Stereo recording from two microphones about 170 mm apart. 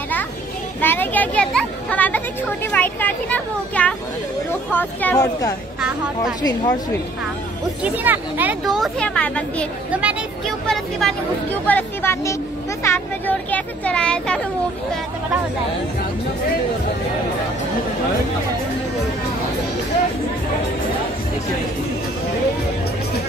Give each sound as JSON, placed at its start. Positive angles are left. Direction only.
{"t": 0.7, "sound": "speech", "side_deg": 10}
{"t": 7.8, "sound": "speech", "side_deg": -10}
{"t": 9.9, "sound": "speech", "side_deg": -10}